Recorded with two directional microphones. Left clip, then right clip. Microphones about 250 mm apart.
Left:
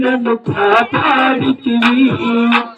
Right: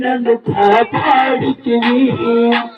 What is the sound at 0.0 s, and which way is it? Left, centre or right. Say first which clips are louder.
Music: right 1 dB; left.